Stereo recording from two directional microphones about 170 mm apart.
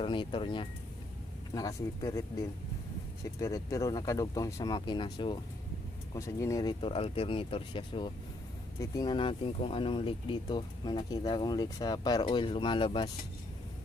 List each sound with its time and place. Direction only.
0.0 s speech: 30° left (ahead or behind)
3.3 s speech: 20° left (ahead or behind)